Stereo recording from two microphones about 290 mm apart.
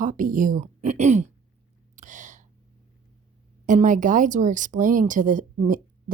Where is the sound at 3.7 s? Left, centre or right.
Right.